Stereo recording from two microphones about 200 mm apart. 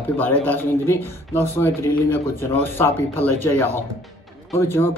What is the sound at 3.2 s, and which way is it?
A man's voice, 10° left (ahead or behind).